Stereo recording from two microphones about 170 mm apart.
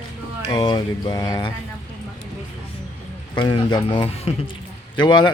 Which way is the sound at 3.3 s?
25° left (ahead or behind).